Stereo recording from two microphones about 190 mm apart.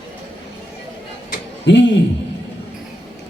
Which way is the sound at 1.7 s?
75° left (ahead or behind).